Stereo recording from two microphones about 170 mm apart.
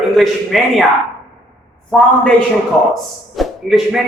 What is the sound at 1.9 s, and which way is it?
Speech, 5° left (ahead or behind).